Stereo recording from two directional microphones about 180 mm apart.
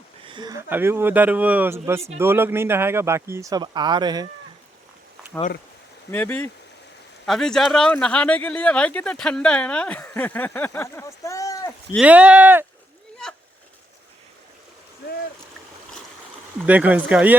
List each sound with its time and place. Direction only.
0.3 s speech: 25° right (ahead or behind)
0.7 s speech: 10° right (ahead or behind)
6.1 s speech: 10° left (ahead or behind)
11.9 s speech: 10° right (ahead or behind)
16.6 s speech: 10° right (ahead or behind)